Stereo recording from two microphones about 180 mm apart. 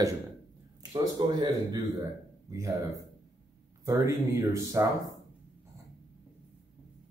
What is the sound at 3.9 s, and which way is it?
Speech, 15° right (ahead or behind).